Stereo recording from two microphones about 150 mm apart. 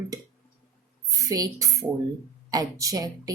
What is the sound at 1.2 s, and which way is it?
A woman's voice, 25° right (ahead or behind).